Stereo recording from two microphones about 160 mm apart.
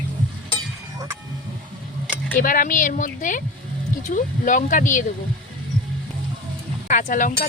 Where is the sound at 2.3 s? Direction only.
60° left (ahead or behind).